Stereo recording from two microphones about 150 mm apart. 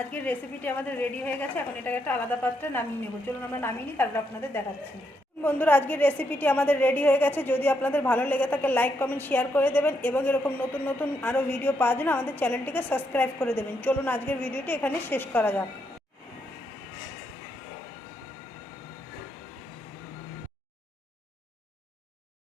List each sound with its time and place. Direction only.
0.0 s a woman's voice: 10° left (ahead or behind)